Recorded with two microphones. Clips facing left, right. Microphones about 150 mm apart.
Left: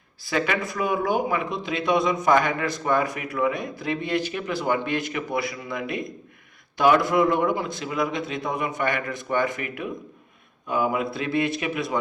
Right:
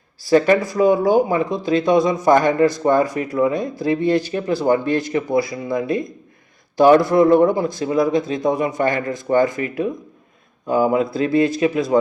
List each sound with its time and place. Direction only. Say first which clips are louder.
0.3 s speech: right 11 dB; 40° right (ahead or behind)
6.7 s speech: right 7 dB; 35° right (ahead or behind)
10.7 s speech: right 7 dB; 35° right (ahead or behind)